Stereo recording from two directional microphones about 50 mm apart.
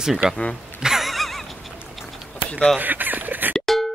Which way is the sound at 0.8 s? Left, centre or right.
Centre.